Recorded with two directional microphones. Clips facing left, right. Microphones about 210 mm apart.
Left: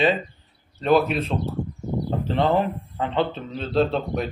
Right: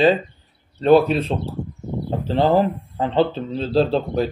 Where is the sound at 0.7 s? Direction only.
35° right (ahead or behind).